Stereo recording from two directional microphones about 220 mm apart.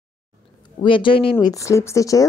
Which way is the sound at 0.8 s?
20° left (ahead or behind).